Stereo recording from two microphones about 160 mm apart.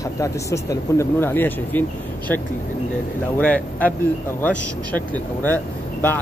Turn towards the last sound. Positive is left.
turn(degrees=10)  # may be behind; listen again after turning